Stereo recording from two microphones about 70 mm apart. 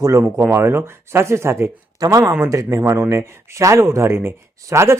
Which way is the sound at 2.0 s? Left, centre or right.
Right.